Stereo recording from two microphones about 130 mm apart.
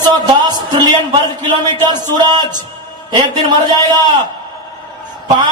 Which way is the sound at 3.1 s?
35° right (ahead or behind).